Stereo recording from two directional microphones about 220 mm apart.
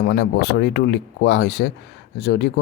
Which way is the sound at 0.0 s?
50° left (ahead or behind).